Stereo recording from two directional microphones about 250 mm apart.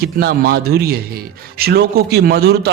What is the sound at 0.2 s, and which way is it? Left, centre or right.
A man's voice, right.